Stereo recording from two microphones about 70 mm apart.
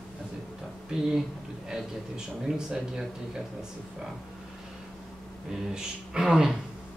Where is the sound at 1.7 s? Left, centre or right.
Centre.